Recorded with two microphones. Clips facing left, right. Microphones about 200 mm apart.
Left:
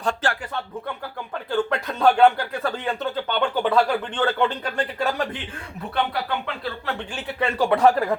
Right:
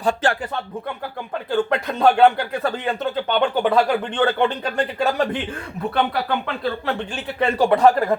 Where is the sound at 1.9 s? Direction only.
15° right (ahead or behind).